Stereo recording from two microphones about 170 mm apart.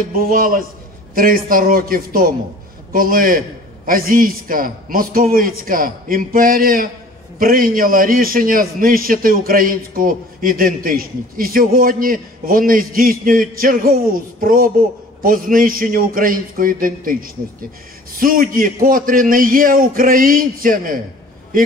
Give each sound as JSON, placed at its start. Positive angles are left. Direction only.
{"t": 0.0, "sound": "a man's voice", "side_deg": -55}